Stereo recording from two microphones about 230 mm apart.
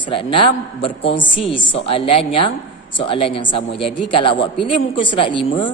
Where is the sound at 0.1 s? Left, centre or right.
Left.